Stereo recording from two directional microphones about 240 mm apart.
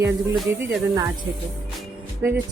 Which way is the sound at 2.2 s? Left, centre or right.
Centre.